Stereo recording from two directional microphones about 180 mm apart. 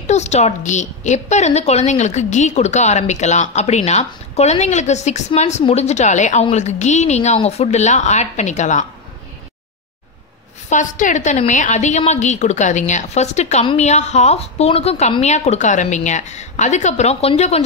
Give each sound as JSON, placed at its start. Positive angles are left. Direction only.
{"t": 0.0, "sound": "a woman's voice", "side_deg": 40}
{"t": 10.7, "sound": "a woman's voice", "side_deg": 45}